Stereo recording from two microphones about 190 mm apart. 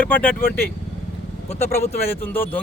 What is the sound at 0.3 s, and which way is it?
Speech, 50° left (ahead or behind).